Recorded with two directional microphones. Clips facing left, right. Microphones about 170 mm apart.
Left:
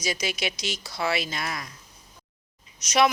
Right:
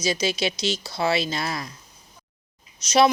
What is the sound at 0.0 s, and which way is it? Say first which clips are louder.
A woman's voice: right 5 dB; 25° right (ahead or behind).